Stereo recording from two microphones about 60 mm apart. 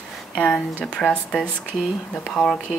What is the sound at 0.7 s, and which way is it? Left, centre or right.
A woman's voice, left.